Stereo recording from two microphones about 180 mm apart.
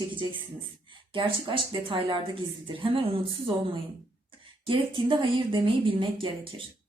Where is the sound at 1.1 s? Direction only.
30° right (ahead or behind).